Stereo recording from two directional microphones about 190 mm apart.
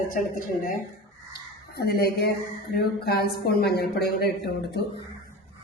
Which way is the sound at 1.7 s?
55° left (ahead or behind).